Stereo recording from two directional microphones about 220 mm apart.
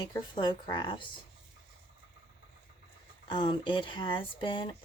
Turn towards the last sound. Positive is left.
turn(degrees=20)  # may be behind; listen again after turning